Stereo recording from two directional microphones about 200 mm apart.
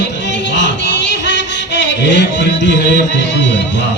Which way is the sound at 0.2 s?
60° left (ahead or behind).